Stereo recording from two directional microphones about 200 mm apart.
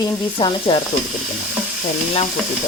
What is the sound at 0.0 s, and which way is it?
Speech, 25° left (ahead or behind).